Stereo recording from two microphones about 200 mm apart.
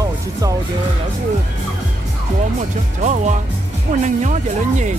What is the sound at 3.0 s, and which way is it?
Speech, 35° right (ahead or behind).